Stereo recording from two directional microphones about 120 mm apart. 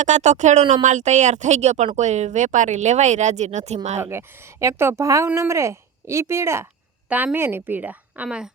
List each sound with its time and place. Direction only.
0.0 s speech: 80° right
0.7 s speech: 90° right
4.0 s a woman's voice: 20° right (ahead or behind)